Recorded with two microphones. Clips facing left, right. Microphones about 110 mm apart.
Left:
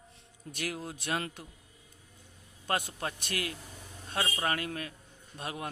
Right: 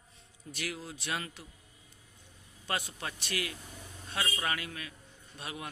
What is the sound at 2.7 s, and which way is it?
A man's voice, 45° left (ahead or behind).